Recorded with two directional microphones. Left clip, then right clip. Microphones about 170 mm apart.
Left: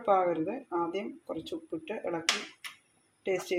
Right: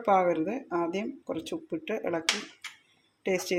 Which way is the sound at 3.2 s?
35° right (ahead or behind).